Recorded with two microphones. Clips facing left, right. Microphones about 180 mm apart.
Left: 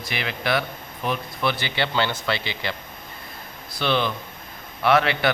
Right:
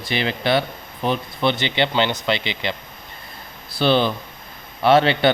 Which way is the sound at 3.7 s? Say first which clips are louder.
Right 5 dB; 30° right (ahead or behind).